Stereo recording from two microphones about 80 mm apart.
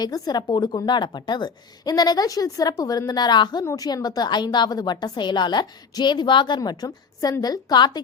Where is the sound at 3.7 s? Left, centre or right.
Left.